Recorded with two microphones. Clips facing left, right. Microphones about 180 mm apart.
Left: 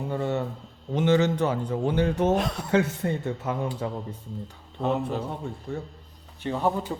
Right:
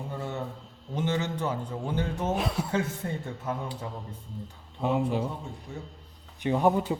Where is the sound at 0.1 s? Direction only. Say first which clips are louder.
Left 8 dB; 75° left (ahead or behind).